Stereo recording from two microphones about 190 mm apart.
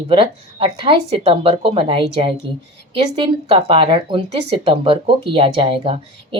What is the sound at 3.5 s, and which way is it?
Speech, 30° right (ahead or behind).